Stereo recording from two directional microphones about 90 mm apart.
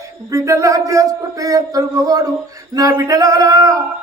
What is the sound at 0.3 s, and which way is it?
A man's voice, 40° right (ahead or behind).